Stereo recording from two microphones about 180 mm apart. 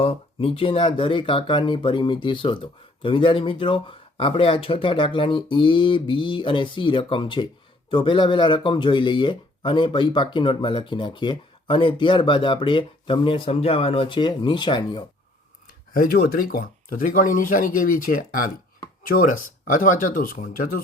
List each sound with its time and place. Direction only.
0.0 s speech: 30° left (ahead or behind)
16.0 s speech: 55° left (ahead or behind)